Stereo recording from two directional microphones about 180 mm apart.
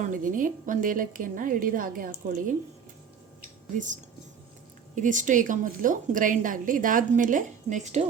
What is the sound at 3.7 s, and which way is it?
A woman's voice, 45° right (ahead or behind).